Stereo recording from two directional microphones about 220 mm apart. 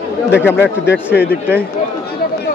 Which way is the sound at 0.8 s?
50° left (ahead or behind).